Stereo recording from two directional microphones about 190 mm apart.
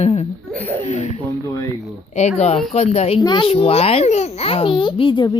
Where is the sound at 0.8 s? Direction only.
35° left (ahead or behind).